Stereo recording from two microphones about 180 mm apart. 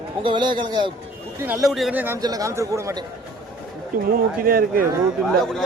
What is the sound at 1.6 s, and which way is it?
Speech, centre (ahead or behind).